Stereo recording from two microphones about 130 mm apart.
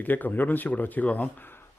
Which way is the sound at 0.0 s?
15° left (ahead or behind).